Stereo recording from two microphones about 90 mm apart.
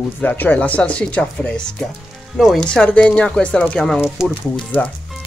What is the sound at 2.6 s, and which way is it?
Speech, 10° left (ahead or behind).